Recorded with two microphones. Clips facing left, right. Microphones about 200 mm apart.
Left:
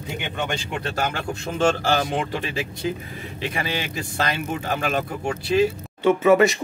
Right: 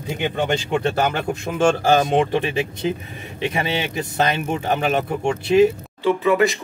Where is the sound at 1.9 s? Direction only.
20° right (ahead or behind).